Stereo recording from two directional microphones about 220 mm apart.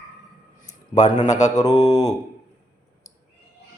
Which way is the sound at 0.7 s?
30° left (ahead or behind).